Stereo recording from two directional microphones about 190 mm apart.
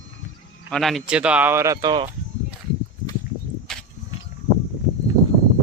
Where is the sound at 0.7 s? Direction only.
Centre (ahead or behind); by 2.0 s 20° right (ahead or behind).